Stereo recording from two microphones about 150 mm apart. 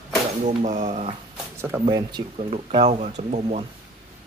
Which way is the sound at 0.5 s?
50° right (ahead or behind).